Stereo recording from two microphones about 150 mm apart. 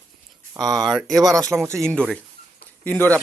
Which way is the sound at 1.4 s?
20° right (ahead or behind).